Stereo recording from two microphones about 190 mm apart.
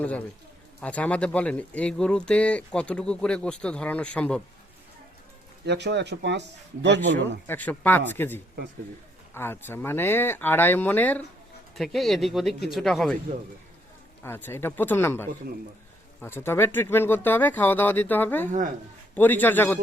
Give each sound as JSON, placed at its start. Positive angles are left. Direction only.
{"t": 0.8, "sound": "speech", "side_deg": 5}
{"t": 5.6, "sound": "speech", "side_deg": -65}
{"t": 7.2, "sound": "speech", "side_deg": 10}
{"t": 14.3, "sound": "speech", "side_deg": 10}